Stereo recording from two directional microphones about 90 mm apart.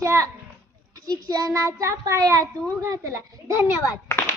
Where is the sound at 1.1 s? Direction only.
45° right (ahead or behind).